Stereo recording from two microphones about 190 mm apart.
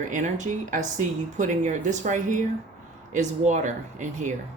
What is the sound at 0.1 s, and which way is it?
Speech, 40° right (ahead or behind).